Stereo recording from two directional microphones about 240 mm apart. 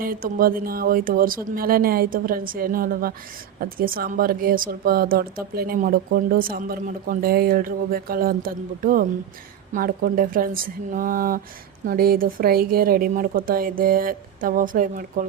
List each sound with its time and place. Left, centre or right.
0.0 s a woman's voice: right